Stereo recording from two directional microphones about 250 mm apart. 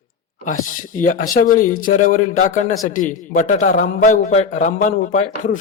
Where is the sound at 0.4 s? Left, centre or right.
Left.